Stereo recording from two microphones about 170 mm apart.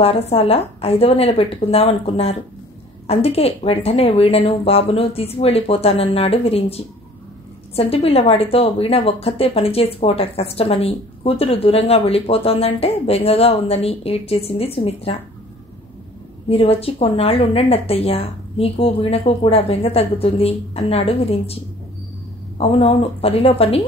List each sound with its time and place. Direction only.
0.0 s a woman's voice: 35° left (ahead or behind)
16.4 s a woman's voice: 35° left (ahead or behind)
22.6 s a woman's voice: 35° left (ahead or behind)